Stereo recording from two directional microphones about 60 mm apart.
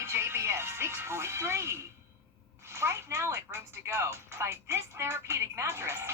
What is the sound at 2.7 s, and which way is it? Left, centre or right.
Speech, right.